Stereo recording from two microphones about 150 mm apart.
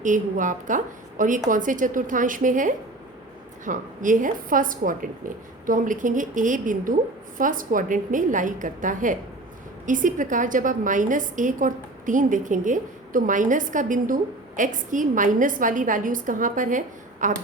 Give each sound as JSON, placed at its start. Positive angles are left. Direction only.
{"t": 0.0, "sound": "a woman's voice", "side_deg": -60}